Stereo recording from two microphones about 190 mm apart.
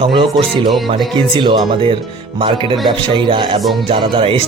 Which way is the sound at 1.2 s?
25° right (ahead or behind).